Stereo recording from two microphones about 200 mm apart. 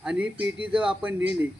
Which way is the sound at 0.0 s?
5° right (ahead or behind).